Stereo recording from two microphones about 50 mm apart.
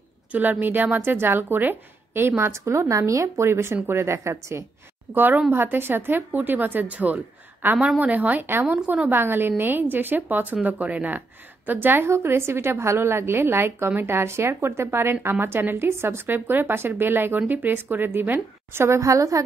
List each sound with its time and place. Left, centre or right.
0.3 s speech: right
5.1 s a woman's voice: right
9.1 s speech: right
12.1 s speech: right
14.1 s speech: right
18.9 s a woman's voice: right